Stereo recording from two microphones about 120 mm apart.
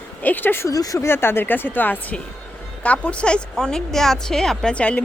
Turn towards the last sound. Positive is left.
turn(degrees=10)  # may be behind; listen again after turning